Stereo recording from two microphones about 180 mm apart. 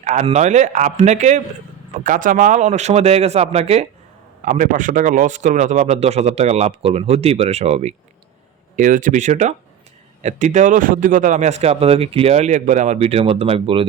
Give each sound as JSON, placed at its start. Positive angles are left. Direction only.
{"t": 0.0, "sound": "a man's voice", "side_deg": -40}
{"t": 4.4, "sound": "a man's voice", "side_deg": -45}
{"t": 8.7, "sound": "a man's voice", "side_deg": -45}